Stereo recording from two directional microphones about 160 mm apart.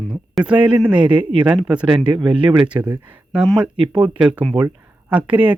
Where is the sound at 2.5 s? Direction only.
30° right (ahead or behind).